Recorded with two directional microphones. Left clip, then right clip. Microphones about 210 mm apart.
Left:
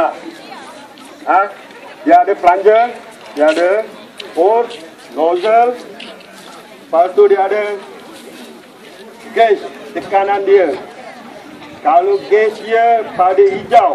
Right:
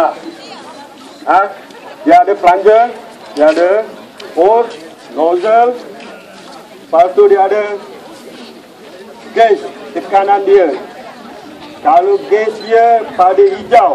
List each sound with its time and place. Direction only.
1.2 s a man's voice: 5° left (ahead or behind)
6.9 s a man's voice: centre (ahead or behind)
9.3 s a man's voice: centre (ahead or behind)
11.8 s a man's voice: centre (ahead or behind)